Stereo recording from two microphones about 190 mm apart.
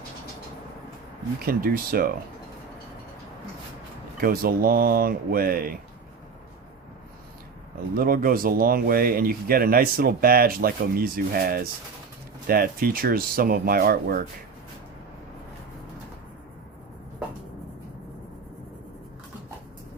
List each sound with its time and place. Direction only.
1.4 s speech: 50° right (ahead or behind)
4.2 s speech: 50° right (ahead or behind)
7.9 s speech: 50° right (ahead or behind)